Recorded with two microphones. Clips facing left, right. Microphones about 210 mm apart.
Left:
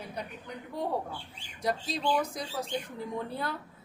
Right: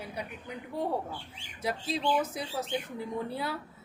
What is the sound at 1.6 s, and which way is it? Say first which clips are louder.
A woman's voice: even; 5° right (ahead or behind).